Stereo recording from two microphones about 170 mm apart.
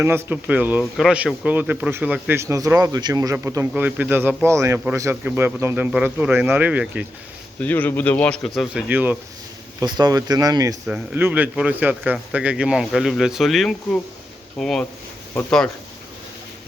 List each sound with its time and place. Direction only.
0.0 s speech: 15° right (ahead or behind)
7.6 s speech: 10° left (ahead or behind); by 9.1 s 10° right (ahead or behind)
9.8 s speech: 20° right (ahead or behind)
10.8 s speech: 10° right (ahead or behind)